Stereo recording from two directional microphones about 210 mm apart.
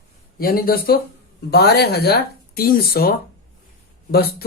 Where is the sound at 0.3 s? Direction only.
45° left (ahead or behind).